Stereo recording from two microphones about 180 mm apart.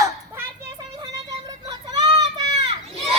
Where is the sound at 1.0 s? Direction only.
20° right (ahead or behind).